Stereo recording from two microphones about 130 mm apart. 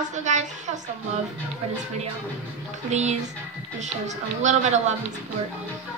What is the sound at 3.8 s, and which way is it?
A woman's voice, 65° right (ahead or behind).